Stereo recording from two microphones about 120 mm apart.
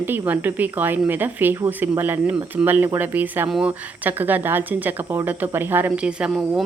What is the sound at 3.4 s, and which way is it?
Speech, 5° right (ahead or behind).